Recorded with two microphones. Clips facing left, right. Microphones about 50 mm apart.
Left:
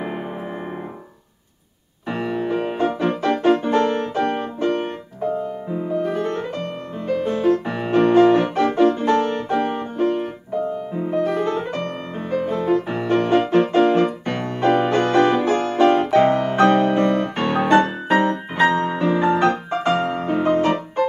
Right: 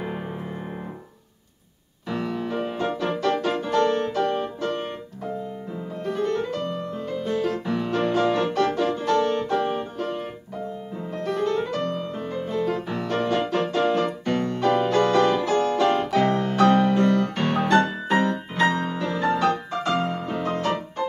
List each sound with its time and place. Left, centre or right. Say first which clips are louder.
2.0 s music: left 4 dB; left
6.1 s music: left 1 dB; left
11.4 s music: left 1 dB; left